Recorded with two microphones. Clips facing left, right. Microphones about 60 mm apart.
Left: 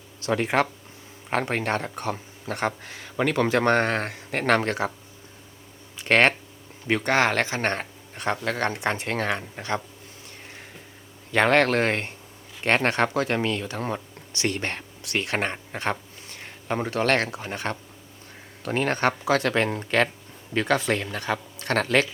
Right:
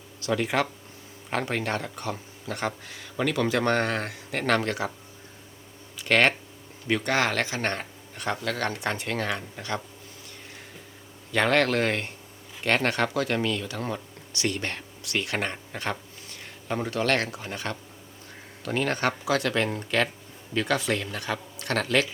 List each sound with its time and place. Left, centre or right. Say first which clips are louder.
0.2 s speech: left 3 dB; left
6.0 s speech: left 2 dB; left
11.3 s speech: left 3 dB; left